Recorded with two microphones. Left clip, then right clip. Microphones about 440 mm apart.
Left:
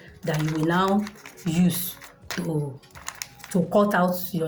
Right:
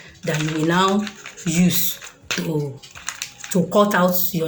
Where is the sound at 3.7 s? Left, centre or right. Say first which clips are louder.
Right 4 dB; left.